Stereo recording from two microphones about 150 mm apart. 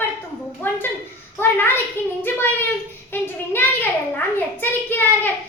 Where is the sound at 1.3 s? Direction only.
15° left (ahead or behind).